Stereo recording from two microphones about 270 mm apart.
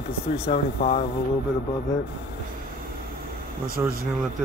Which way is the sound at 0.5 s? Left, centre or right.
Left.